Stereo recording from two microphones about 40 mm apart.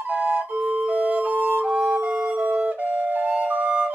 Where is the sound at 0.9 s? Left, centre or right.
Right.